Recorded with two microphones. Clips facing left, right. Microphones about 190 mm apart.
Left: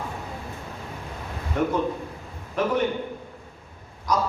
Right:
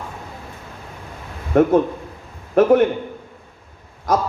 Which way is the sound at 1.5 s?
50° right (ahead or behind).